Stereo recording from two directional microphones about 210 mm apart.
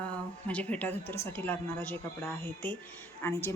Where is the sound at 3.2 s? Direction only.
10° left (ahead or behind).